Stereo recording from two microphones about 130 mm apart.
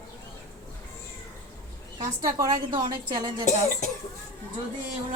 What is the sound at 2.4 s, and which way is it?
Speech, 30° right (ahead or behind).